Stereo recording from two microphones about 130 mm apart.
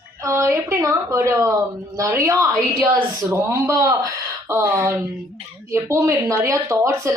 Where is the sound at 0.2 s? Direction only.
20° right (ahead or behind).